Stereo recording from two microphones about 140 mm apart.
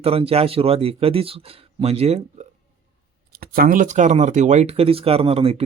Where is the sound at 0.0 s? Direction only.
45° right (ahead or behind).